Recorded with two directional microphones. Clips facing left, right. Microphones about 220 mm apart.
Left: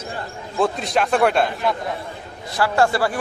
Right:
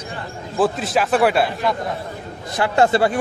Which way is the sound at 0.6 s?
5° right (ahead or behind).